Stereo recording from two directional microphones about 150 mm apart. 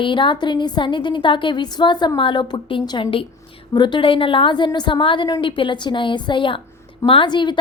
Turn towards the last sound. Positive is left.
turn(degrees=30)  # may be behind; listen again after turning